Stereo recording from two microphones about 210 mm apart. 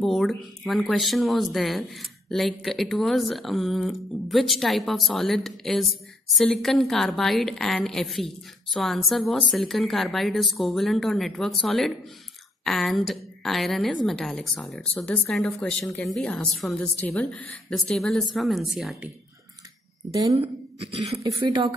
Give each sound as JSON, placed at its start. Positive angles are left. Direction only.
{"t": 0.0, "sound": "speech", "side_deg": 0}
{"t": 20.2, "sound": "speech", "side_deg": -25}